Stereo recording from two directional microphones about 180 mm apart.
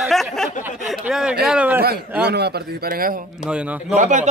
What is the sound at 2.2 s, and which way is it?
Speech, 65° right (ahead or behind).